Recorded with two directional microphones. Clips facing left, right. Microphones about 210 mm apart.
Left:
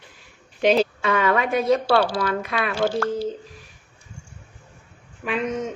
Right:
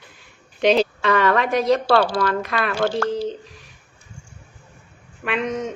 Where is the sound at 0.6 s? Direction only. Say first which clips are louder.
Right 1 dB; centre (ahead or behind).